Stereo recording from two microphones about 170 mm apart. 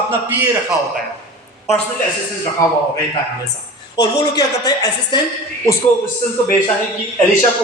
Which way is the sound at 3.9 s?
20° left (ahead or behind).